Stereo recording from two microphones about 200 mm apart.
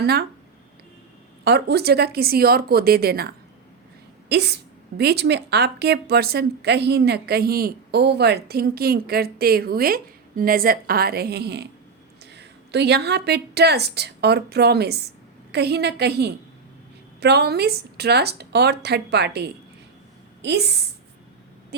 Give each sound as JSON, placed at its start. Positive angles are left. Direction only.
{"t": 0.0, "sound": "a woman's voice", "side_deg": -50}
{"t": 1.5, "sound": "a woman's voice", "side_deg": -55}